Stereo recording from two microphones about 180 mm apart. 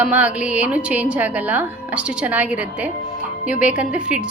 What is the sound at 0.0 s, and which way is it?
A woman's voice, 5° right (ahead or behind).